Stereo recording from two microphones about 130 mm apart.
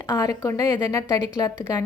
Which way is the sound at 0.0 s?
25° left (ahead or behind).